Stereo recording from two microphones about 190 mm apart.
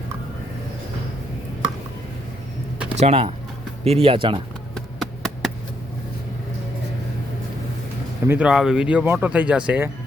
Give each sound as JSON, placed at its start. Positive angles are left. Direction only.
{"t": 3.0, "sound": "speech", "side_deg": -30}
{"t": 4.7, "sound": "a sound", "side_deg": 0}
{"t": 8.3, "sound": "speech", "side_deg": -5}